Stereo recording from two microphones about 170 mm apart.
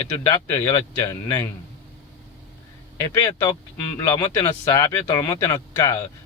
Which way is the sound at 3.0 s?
20° left (ahead or behind).